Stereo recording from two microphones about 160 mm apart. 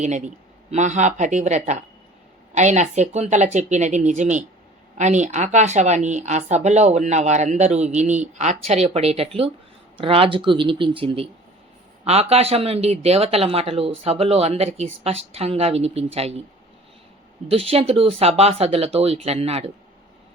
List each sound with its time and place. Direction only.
0.7 s speech: 50° right (ahead or behind)
17.5 s speech: 40° right (ahead or behind)